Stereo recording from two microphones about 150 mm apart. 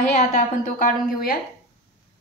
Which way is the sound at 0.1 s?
55° left (ahead or behind).